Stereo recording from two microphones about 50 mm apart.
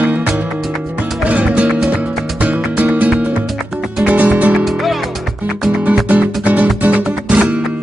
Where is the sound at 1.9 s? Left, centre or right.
Right.